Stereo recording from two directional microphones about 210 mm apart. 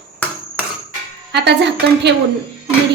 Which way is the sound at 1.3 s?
55° right (ahead or behind).